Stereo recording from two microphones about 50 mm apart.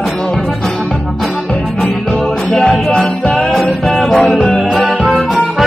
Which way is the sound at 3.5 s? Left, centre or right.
Centre.